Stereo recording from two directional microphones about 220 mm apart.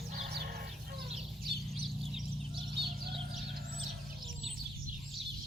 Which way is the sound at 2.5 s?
20° right (ahead or behind).